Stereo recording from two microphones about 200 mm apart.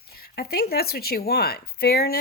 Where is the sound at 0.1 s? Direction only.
50° left (ahead or behind).